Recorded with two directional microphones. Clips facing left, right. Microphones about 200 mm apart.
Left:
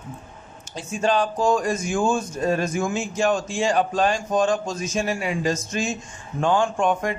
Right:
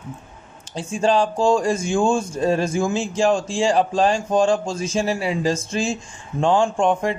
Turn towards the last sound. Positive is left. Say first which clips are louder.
# right 3 dB
turn(degrees=-30)  # may be behind; listen again after turning